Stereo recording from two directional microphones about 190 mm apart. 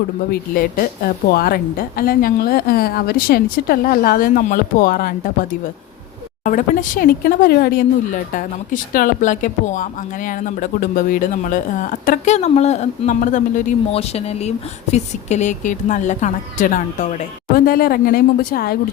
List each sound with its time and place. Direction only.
0.3 s speech: 50° left (ahead or behind)